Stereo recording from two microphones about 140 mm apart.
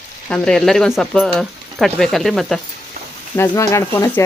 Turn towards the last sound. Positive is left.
turn(degrees=15)  # may be behind; listen again after turning